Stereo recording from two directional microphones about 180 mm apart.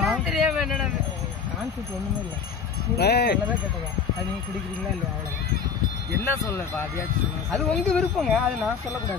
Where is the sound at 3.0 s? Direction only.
65° left (ahead or behind).